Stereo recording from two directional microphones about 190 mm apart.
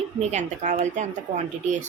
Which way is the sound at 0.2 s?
35° right (ahead or behind).